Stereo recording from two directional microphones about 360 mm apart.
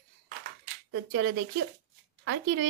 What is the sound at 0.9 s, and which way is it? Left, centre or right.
A woman's voice, right.